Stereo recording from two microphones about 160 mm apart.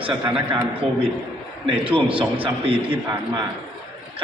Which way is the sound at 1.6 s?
35° right (ahead or behind).